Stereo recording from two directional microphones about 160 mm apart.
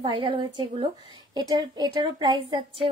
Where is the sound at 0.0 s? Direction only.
30° right (ahead or behind).